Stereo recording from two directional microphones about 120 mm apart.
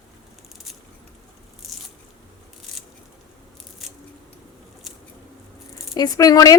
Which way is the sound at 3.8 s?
Centre (ahead or behind).